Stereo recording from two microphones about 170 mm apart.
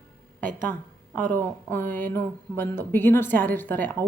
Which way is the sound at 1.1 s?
50° right (ahead or behind).